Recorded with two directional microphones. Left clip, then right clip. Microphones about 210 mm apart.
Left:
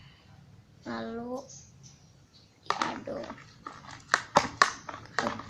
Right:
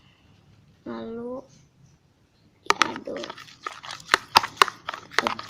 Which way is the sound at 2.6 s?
40° right (ahead or behind).